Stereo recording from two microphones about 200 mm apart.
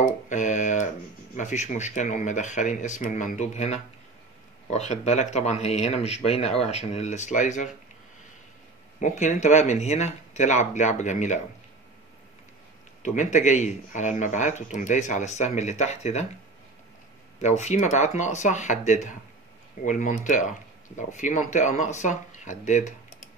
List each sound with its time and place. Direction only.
0.0 s a sound: 35° left (ahead or behind)
1.3 s speech: 35° left (ahead or behind)
9.0 s speech: 35° left (ahead or behind)
13.0 s speech: 35° left (ahead or behind)
17.4 s speech: 35° left (ahead or behind)